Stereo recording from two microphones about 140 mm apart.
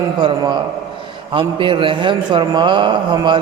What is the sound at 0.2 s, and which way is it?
A man's voice, 30° right (ahead or behind).